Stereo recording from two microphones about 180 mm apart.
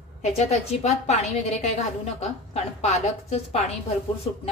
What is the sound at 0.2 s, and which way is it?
A woman's voice, 35° left (ahead or behind).